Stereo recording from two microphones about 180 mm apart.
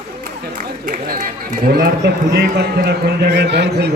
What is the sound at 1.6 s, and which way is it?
A man's voice, 65° right (ahead or behind).